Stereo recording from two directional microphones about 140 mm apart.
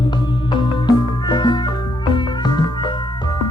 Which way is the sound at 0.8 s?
35° left (ahead or behind).